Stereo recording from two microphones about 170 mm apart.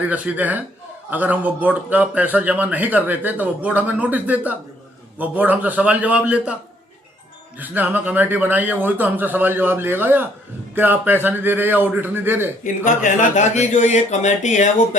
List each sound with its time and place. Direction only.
0.0 s a man's voice: 10° right (ahead or behind)
7.6 s a man's voice: 10° right (ahead or behind)
12.6 s speech: 50° left (ahead or behind)